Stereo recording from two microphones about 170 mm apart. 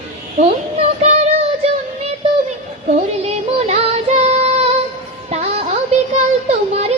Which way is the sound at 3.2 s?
35° right (ahead or behind).